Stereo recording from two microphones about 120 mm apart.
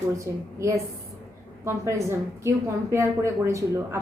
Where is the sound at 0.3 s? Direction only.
25° right (ahead or behind).